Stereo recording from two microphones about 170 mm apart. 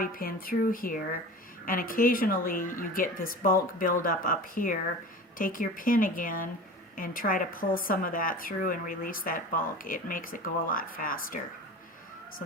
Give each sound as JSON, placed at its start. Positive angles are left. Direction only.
{"t": 0.0, "sound": "speech", "side_deg": 55}